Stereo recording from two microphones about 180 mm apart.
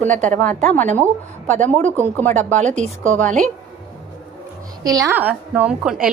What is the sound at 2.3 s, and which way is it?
Speech, 40° right (ahead or behind).